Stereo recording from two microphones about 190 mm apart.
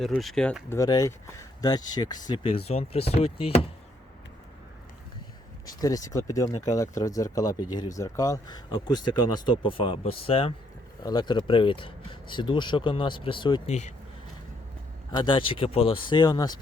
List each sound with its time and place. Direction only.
0.0 s speech: centre (ahead or behind); by 3.7 s 30° left (ahead or behind)
5.6 s speech: 20° left (ahead or behind)
13.7 s speech: 35° left (ahead or behind)
15.1 s speech: 25° left (ahead or behind)